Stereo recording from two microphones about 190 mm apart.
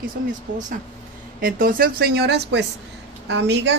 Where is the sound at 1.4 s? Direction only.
45° right (ahead or behind).